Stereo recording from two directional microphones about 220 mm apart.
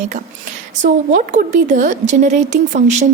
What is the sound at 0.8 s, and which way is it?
A woman's voice, 35° right (ahead or behind).